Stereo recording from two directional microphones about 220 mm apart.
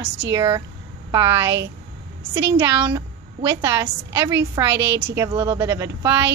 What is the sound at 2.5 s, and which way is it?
Speech, 10° right (ahead or behind).